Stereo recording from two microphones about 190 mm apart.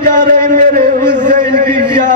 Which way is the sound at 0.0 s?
40° right (ahead or behind).